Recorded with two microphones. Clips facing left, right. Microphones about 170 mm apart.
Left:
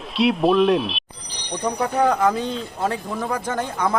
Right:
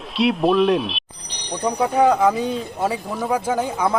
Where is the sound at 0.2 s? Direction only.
Centre (ahead or behind).